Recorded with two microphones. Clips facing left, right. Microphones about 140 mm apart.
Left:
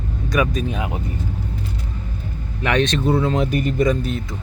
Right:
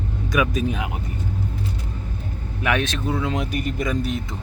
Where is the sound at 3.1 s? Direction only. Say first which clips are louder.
Left 3 dB; 35° left (ahead or behind).